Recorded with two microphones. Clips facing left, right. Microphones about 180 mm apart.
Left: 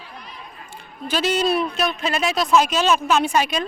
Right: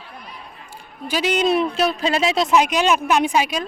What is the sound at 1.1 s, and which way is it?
Speech, 10° right (ahead or behind).